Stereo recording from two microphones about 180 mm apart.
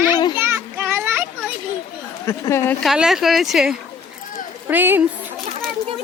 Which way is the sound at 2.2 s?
15° left (ahead or behind).